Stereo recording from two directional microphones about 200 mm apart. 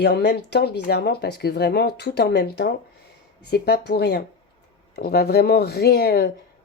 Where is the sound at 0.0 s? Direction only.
55° left (ahead or behind).